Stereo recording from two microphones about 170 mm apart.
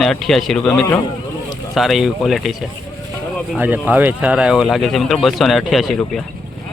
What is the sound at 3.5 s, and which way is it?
Speech, 10° right (ahead or behind).